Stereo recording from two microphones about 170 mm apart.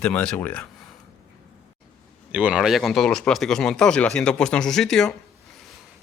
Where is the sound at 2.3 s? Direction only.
5° right (ahead or behind).